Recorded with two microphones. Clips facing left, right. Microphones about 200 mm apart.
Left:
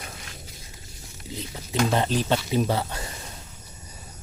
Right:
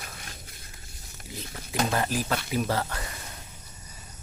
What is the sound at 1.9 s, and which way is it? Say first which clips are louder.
Speech: left 5 dB; 25° left (ahead or behind).